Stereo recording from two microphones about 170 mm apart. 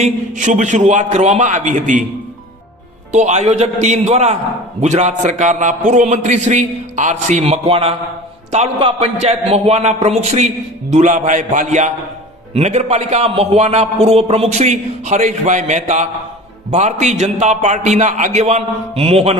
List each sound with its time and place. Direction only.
0.0 s a man's voice: 45° right (ahead or behind)
3.1 s a man's voice: 45° right (ahead or behind)